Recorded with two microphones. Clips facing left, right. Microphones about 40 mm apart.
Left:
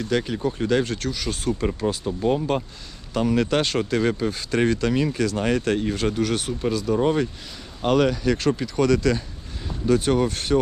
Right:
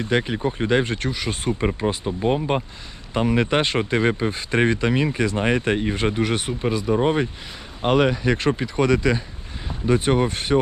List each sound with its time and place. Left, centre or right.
0.0 s speech: right